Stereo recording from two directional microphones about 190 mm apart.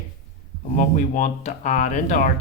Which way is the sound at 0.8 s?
40° left (ahead or behind).